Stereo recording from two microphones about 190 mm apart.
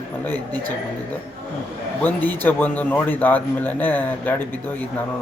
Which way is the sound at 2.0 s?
10° left (ahead or behind).